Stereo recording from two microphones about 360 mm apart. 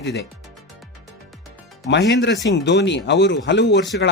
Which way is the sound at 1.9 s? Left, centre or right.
Left.